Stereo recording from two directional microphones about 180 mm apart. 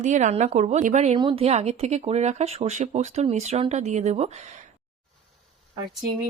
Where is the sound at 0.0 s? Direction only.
40° right (ahead or behind).